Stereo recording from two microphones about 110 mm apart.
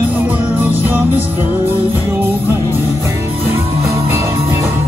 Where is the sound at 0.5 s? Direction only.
15° right (ahead or behind).